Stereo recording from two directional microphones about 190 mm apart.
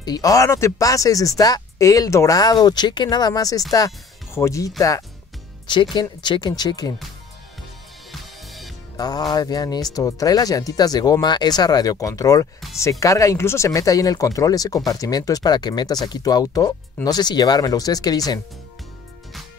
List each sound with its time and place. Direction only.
0.0 s speech: 20° left (ahead or behind)
8.1 s music: centre (ahead or behind)
8.9 s speech: 20° left (ahead or behind)